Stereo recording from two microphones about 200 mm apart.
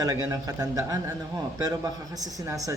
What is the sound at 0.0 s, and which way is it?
Speech, 15° right (ahead or behind).